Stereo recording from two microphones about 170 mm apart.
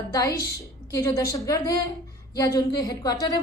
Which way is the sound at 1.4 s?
20° left (ahead or behind).